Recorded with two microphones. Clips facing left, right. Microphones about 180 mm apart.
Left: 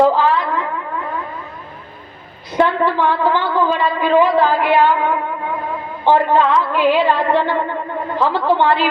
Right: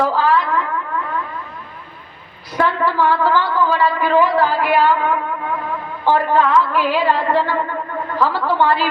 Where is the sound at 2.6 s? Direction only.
20° left (ahead or behind).